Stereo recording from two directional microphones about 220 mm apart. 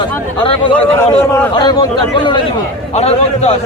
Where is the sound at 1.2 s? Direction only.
10° left (ahead or behind).